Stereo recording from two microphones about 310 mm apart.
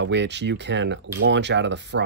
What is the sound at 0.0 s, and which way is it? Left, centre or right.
Speech, right.